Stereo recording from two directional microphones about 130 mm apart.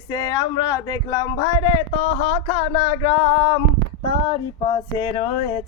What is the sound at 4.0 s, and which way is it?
Speech, 40° left (ahead or behind).